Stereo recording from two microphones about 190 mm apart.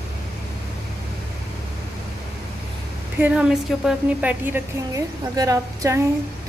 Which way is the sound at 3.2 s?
5° right (ahead or behind).